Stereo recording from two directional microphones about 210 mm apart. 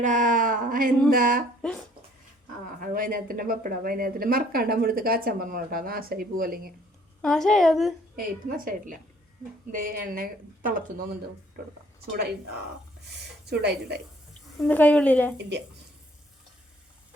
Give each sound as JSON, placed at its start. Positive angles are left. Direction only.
{"t": 0.0, "sound": "speech", "side_deg": -35}
{"t": 2.8, "sound": "speech", "side_deg": -40}
{"t": 7.2, "sound": "a woman's voice", "side_deg": 0}
{"t": 8.1, "sound": "speech", "side_deg": -40}
{"t": 13.4, "sound": "a woman's voice", "side_deg": -50}
{"t": 14.7, "sound": "a woman's voice", "side_deg": 10}
{"t": 15.4, "sound": "speech", "side_deg": -55}